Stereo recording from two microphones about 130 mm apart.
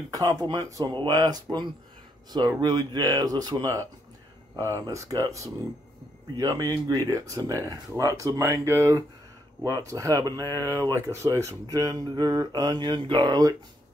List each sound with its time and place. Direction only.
0.1 s speech: 30° right (ahead or behind)